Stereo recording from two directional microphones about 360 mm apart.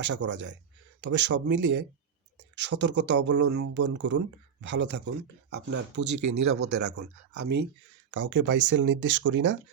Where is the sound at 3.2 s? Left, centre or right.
Right.